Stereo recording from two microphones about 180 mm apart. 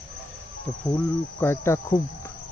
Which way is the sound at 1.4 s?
15° left (ahead or behind).